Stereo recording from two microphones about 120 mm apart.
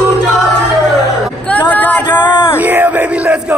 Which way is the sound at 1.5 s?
10° left (ahead or behind).